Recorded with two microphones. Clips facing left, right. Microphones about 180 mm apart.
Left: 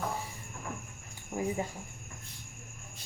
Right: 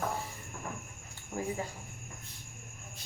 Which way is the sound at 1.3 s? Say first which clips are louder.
Left 3 dB; 10° left (ahead or behind).